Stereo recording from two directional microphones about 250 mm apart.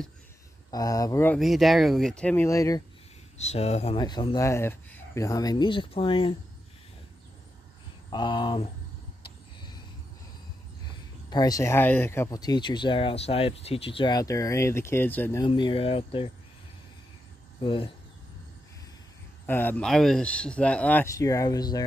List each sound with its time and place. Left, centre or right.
0.7 s speech: centre
3.3 s speech: left
8.1 s speech: centre
11.2 s speech: centre
17.6 s speech: centre
19.4 s speech: centre